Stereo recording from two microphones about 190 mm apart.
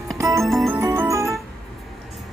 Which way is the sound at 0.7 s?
15° right (ahead or behind).